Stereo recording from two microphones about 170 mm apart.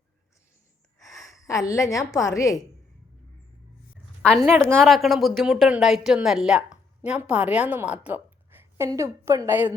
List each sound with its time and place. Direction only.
0.9 s a woman's voice: 20° left (ahead or behind)
4.2 s a woman's voice: 5° left (ahead or behind)
4.4 s a woman's voice: 15° right (ahead or behind)
4.8 s a woman's voice: centre (ahead or behind)